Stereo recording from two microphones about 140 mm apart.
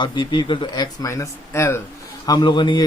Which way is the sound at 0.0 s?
35° left (ahead or behind).